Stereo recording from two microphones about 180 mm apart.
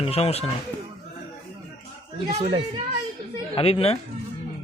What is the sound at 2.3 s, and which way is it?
Speech, 35° right (ahead or behind).